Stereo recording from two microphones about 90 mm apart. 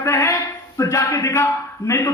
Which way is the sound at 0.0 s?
35° left (ahead or behind).